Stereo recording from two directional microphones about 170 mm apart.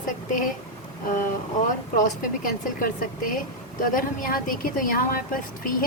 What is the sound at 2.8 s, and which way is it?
A woman's voice, 55° left (ahead or behind).